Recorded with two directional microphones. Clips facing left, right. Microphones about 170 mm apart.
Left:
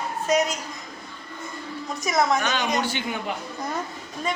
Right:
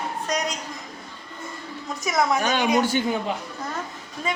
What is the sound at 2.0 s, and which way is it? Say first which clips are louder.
Speech: even; centre (ahead or behind).